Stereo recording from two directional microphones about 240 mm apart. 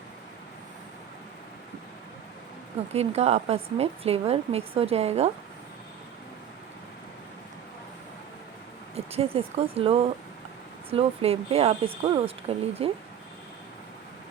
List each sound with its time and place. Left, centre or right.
2.9 s a woman's voice: right
9.0 s a woman's voice: right